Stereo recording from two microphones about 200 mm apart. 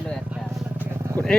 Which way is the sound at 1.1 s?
5° left (ahead or behind).